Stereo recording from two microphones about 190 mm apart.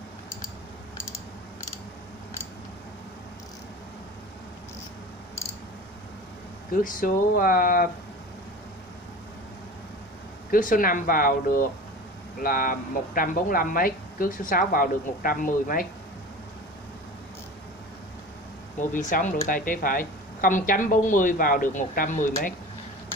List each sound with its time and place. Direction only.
6.7 s speech: 45° left (ahead or behind)
10.5 s speech: 45° left (ahead or behind)
18.8 s speech: 45° left (ahead or behind)